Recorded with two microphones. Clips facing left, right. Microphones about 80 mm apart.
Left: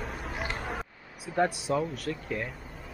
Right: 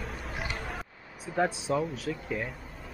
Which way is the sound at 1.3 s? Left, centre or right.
Centre.